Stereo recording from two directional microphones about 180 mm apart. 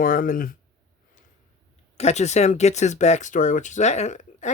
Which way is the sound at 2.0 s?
40° left (ahead or behind).